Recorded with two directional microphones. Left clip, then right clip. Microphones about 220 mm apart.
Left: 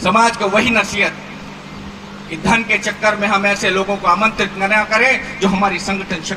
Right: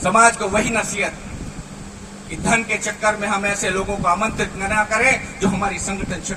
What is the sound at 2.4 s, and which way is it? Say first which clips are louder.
A man's voice: left 4 dB; 55° right (ahead or behind).